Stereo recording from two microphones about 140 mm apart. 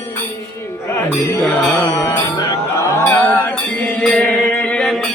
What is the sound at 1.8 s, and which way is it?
Music, 25° left (ahead or behind).